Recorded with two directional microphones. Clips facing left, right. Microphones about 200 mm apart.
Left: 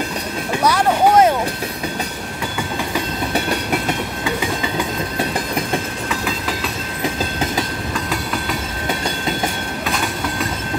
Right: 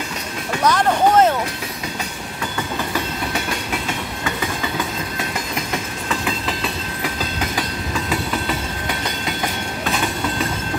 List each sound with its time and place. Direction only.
0.7 s vehicle: 10° left (ahead or behind)